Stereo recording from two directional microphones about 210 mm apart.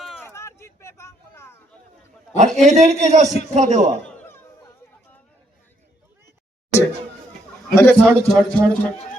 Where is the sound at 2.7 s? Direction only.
35° right (ahead or behind).